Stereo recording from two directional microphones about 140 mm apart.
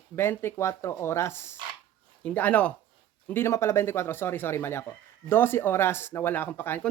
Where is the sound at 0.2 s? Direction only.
15° left (ahead or behind).